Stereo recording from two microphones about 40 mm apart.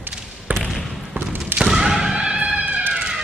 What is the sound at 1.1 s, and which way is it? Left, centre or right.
Thump, right.